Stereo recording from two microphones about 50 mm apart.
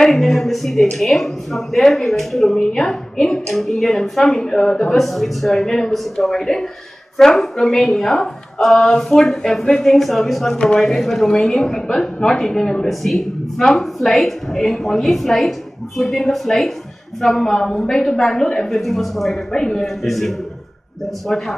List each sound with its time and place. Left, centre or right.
0.0 s a woman's voice: centre
10.5 s a woman's voice: centre
18.8 s a woman's voice: centre